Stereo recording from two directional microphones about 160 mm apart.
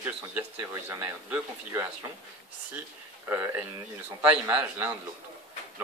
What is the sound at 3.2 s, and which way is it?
Speech, 10° right (ahead or behind).